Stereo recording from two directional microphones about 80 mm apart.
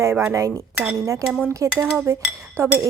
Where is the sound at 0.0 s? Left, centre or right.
Right.